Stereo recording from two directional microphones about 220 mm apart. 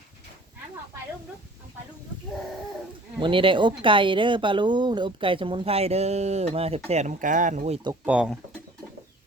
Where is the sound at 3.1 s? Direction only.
20° right (ahead or behind).